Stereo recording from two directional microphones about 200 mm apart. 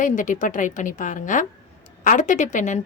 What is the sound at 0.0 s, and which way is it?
A woman's voice, 40° left (ahead or behind).